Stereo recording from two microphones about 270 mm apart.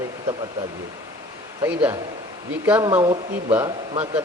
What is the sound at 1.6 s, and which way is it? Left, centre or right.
A man's voice, centre.